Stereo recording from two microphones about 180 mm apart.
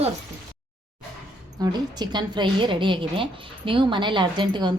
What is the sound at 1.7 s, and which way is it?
A woman's voice, 25° right (ahead or behind).